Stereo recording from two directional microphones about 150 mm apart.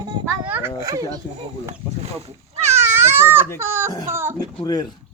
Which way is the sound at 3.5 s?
15° right (ahead or behind).